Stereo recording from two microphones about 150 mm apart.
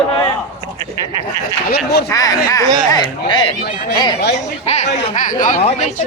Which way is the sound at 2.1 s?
25° left (ahead or behind).